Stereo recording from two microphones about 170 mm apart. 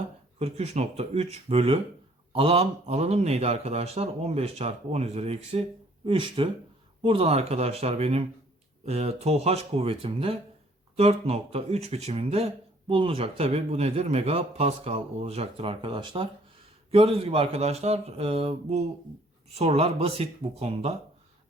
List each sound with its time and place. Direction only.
0.3 s a man's voice: 40° right (ahead or behind)